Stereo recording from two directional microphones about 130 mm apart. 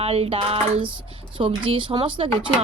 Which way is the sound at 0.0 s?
45° right (ahead or behind).